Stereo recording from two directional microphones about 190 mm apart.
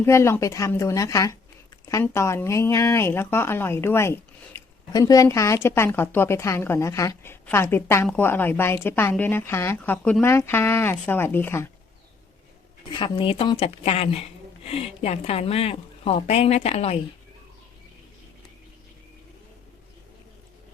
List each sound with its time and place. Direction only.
0.0 s speech: 15° left (ahead or behind)
12.9 s speech: 25° left (ahead or behind)